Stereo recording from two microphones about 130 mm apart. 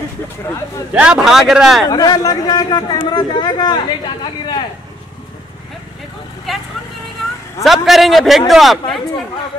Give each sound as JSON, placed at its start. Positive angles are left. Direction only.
{"t": 0.9, "sound": "a man's voice", "side_deg": -5}
{"t": 1.9, "sound": "a man's voice", "side_deg": 30}
{"t": 7.6, "sound": "a man's voice", "side_deg": 0}